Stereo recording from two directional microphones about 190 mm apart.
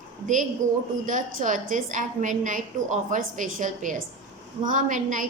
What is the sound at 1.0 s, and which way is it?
A woman's voice, 45° right (ahead or behind).